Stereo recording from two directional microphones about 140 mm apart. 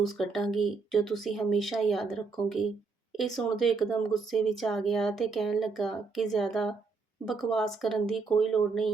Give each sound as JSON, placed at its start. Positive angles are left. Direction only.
{"t": 0.0, "sound": "speech", "side_deg": 0}